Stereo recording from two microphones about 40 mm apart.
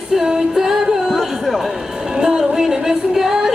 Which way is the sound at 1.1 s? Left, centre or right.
Centre.